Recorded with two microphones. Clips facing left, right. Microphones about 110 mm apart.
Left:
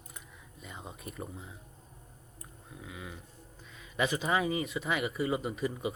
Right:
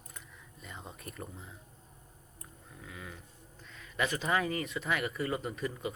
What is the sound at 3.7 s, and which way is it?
Speech, 10° left (ahead or behind).